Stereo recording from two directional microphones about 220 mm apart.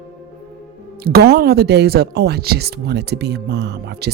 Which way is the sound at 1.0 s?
45° right (ahead or behind).